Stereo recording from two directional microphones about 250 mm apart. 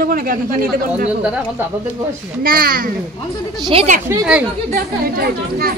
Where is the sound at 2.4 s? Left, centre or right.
Right.